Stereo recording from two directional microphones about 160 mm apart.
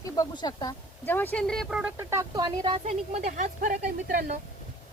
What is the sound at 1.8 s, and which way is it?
Speech, 15° right (ahead or behind).